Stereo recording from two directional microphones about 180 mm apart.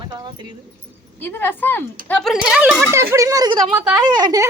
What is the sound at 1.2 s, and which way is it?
A woman's voice, 10° left (ahead or behind).